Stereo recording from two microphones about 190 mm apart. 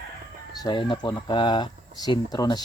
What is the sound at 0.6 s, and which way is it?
Speech, 25° left (ahead or behind).